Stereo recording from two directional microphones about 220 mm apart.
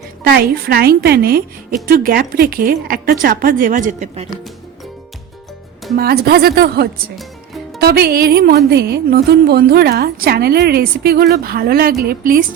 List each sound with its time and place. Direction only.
0.3 s a woman's voice: 45° right (ahead or behind)
6.0 s speech: 45° right (ahead or behind)
7.2 s music: centre (ahead or behind)
7.8 s a woman's voice: 45° right (ahead or behind)